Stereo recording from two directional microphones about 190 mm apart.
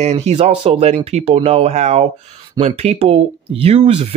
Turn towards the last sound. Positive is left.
turn(degrees=-35)  # may be behind; listen again after turning